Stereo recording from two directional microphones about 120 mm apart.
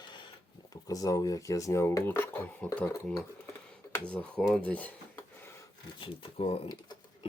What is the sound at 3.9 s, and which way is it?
Speech, 10° left (ahead or behind).